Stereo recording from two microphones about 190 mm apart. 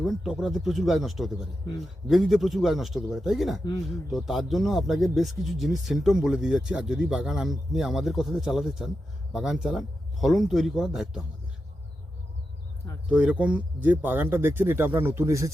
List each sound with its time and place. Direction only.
0.0 s speech: centre (ahead or behind)
13.1 s speech: 5° right (ahead or behind)